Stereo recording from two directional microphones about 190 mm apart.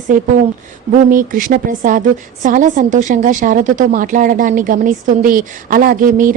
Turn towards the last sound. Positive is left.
turn(degrees=-45)  # may be behind; listen again after turning